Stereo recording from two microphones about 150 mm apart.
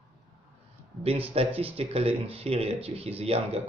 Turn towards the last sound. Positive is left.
turn(degrees=-40)  # may be behind; listen again after turning